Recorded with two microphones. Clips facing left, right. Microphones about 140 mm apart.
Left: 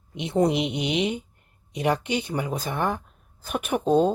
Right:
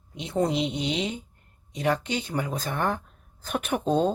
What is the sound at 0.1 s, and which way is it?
A woman's voice, 20° left (ahead or behind).